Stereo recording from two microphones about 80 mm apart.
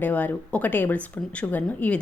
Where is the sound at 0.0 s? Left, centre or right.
Left.